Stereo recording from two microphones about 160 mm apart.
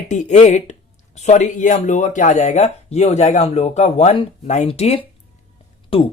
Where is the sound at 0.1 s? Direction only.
50° left (ahead or behind).